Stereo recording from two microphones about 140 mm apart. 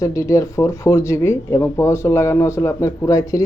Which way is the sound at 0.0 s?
20° left (ahead or behind).